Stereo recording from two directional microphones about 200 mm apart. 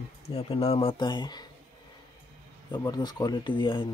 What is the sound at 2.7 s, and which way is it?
Speech, 20° left (ahead or behind).